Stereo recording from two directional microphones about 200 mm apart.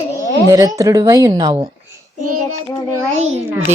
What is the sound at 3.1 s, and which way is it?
Speech, 35° right (ahead or behind).